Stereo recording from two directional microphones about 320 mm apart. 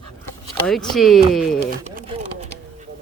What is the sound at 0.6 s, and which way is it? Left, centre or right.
Speech, centre.